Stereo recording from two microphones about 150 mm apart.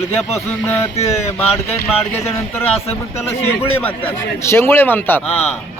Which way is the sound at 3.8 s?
10° left (ahead or behind).